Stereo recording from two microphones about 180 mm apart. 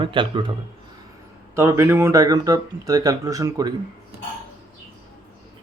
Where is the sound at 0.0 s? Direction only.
25° right (ahead or behind).